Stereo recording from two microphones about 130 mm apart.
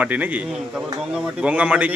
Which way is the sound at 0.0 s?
10° right (ahead or behind).